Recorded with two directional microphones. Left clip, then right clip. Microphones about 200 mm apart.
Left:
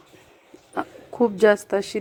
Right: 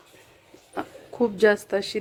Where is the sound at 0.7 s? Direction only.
Centre (ahead or behind).